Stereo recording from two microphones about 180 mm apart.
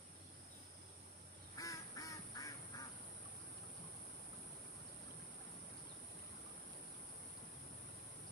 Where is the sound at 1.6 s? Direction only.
20° left (ahead or behind).